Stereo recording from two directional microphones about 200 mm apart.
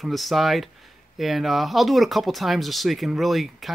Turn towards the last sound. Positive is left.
turn(degrees=0)  # may be behind; listen again after turning